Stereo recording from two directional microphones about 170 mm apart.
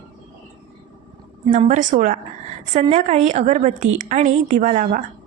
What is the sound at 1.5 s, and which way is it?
A woman's voice, 45° right (ahead or behind).